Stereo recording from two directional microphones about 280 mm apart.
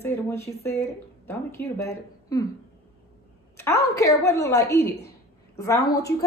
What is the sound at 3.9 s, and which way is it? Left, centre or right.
A woman's voice, centre.